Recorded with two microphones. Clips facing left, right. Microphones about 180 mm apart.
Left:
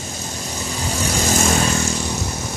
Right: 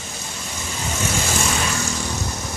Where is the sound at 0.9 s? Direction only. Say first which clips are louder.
Left 3 dB; 35° left (ahead or behind).